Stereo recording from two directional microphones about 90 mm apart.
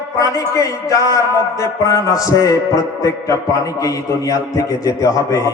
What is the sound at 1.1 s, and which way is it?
Music, 35° left (ahead or behind).